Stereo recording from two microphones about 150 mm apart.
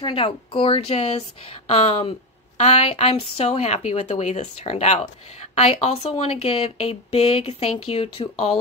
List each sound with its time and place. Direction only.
0.0 s speech: 35° left (ahead or behind)